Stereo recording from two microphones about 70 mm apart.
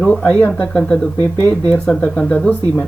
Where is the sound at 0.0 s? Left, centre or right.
Centre.